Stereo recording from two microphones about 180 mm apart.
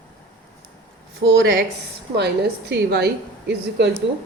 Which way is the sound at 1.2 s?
65° right (ahead or behind).